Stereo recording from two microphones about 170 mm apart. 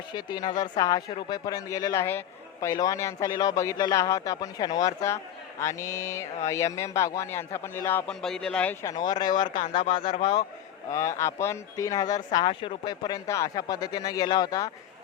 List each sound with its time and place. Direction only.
0.1 s a man's voice: 25° left (ahead or behind); by 8.7 s 5° left (ahead or behind)
8.8 s speech: 20° left (ahead or behind)